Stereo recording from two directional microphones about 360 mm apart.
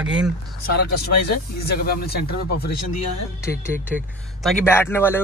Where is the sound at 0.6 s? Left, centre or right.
Left.